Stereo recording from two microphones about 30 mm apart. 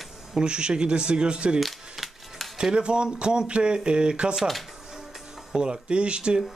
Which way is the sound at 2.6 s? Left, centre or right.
Right.